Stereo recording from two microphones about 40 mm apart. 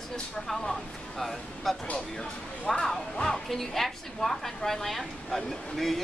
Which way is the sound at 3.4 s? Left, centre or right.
Centre.